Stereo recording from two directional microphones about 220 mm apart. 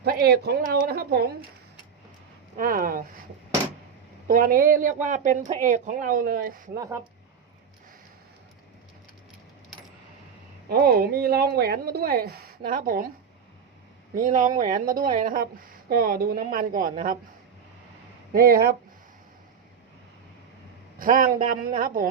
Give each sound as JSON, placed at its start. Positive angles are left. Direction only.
{"t": 0.0, "sound": "speech", "side_deg": -45}
{"t": 2.6, "sound": "speech", "side_deg": -40}
{"t": 4.3, "sound": "speech", "side_deg": -40}
{"t": 6.7, "sound": "speech", "side_deg": -15}
{"t": 10.7, "sound": "speech", "side_deg": -45}
{"t": 14.1, "sound": "speech", "side_deg": -40}
{"t": 18.3, "sound": "speech", "side_deg": -40}
{"t": 21.0, "sound": "speech", "side_deg": -40}